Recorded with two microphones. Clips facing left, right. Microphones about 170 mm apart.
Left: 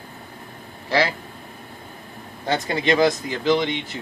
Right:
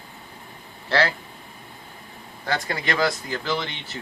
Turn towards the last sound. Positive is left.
turn(degrees=15)  # may be behind; listen again after turning